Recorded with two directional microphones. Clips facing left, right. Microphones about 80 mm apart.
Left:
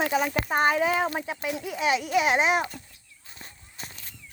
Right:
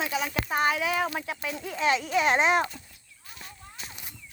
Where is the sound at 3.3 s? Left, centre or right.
Left.